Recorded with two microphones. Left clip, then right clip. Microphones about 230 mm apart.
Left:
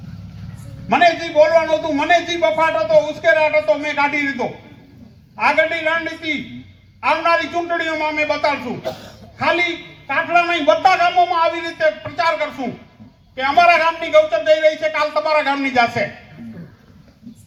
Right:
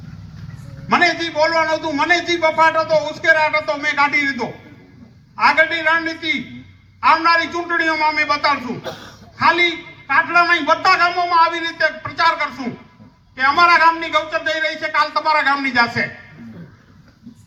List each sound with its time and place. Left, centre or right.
0.9 s a man's voice: right
10.1 s a man's voice: right